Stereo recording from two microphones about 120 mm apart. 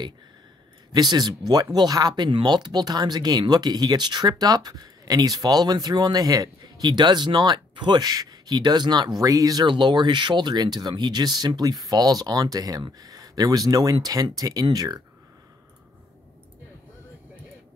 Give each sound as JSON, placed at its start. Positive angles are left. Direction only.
{"t": 0.9, "sound": "speech", "side_deg": -35}